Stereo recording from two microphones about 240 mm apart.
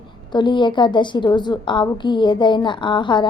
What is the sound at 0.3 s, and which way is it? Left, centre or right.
A woman's voice, centre.